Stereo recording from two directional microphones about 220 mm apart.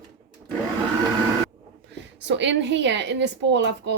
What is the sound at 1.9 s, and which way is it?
A woman's voice, 55° right (ahead or behind).